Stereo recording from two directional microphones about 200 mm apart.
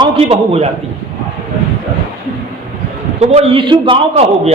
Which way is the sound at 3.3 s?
30° right (ahead or behind).